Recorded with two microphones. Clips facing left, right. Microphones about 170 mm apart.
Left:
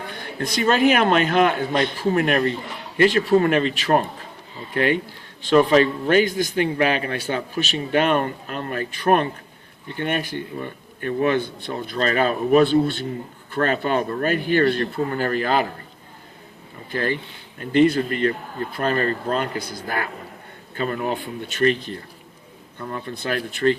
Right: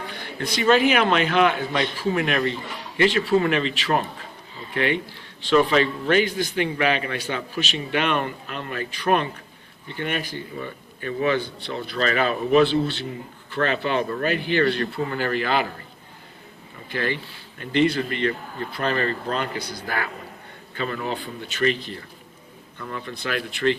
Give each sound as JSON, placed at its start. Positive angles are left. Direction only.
{"t": 0.1, "sound": "a man's voice", "side_deg": 50}
{"t": 16.9, "sound": "a man's voice", "side_deg": 45}
{"t": 20.7, "sound": "a man's voice", "side_deg": 45}
{"t": 22.8, "sound": "a man's voice", "side_deg": 40}